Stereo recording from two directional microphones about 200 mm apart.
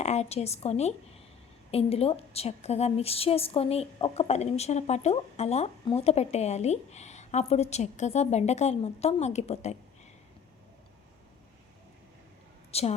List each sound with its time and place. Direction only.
0.0 s a woman's voice: 35° left (ahead or behind)
12.7 s a woman's voice: 30° left (ahead or behind)